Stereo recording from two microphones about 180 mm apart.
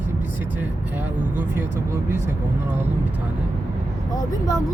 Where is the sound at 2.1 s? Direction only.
15° right (ahead or behind).